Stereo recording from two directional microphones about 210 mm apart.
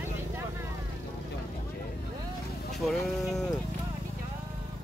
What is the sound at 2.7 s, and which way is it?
Speech, centre (ahead or behind).